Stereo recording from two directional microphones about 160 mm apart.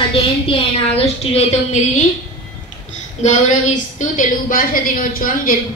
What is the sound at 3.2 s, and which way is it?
A woman's voice, 45° left (ahead or behind).